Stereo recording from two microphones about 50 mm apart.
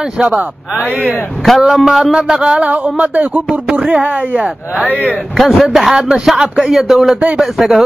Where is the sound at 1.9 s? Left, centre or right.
Centre.